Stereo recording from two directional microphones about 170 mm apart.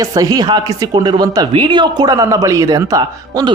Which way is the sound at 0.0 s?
20° right (ahead or behind).